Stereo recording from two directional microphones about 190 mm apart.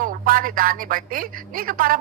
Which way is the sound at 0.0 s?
45° right (ahead or behind).